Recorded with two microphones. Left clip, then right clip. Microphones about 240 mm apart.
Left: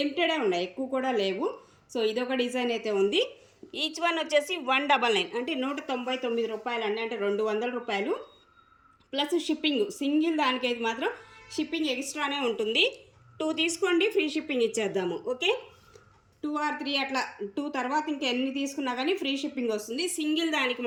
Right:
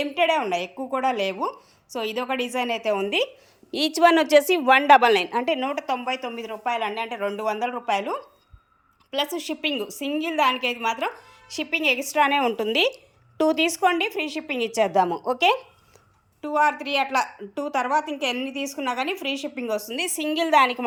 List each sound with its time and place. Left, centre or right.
0.2 s a woman's voice: centre
3.7 s speech: right
5.0 s a woman's voice: centre